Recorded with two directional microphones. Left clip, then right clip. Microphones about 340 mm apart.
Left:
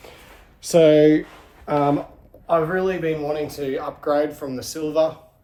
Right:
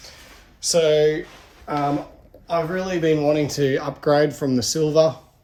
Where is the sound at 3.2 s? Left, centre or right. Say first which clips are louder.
Right 5 dB; right.